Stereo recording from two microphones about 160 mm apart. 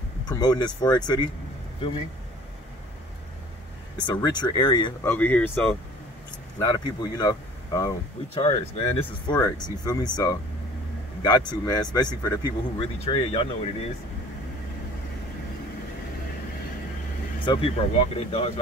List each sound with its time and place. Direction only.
0.2 s speech: 25° left (ahead or behind)
4.1 s speech: 25° left (ahead or behind)
5.0 s speech: 10° left (ahead or behind)
6.6 s speech: 25° left (ahead or behind)
8.4 s speech: 35° left (ahead or behind)
9.3 s speech: 25° left (ahead or behind)
13.0 s speech: 35° left (ahead or behind)
17.5 s speech: 35° left (ahead or behind)